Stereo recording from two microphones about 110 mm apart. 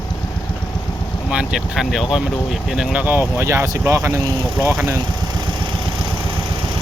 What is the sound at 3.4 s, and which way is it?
Speech, 25° right (ahead or behind).